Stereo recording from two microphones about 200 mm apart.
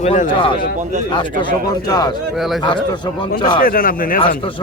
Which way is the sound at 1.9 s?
20° left (ahead or behind).